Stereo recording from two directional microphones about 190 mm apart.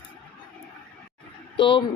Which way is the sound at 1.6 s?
25° left (ahead or behind).